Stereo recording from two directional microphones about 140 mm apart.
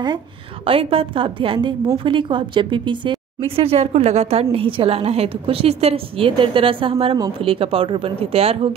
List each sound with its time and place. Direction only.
0.7 s a woman's voice: 40° right (ahead or behind)